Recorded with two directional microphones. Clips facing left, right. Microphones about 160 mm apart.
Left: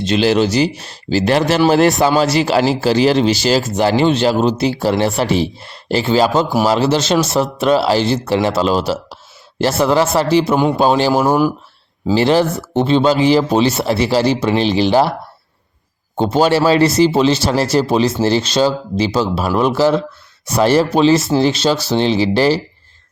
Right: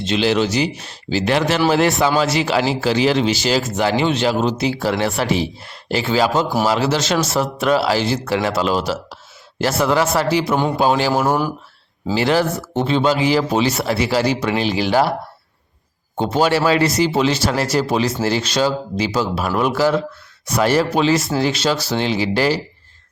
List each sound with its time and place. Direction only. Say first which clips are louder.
0.0 s speech: left 4 dB; 40° left (ahead or behind)
10.5 s a man's voice: left 4 dB; 15° left (ahead or behind)
10.8 s speech: left 3 dB; 30° left (ahead or behind)
16.1 s speech: left 3 dB; 30° left (ahead or behind)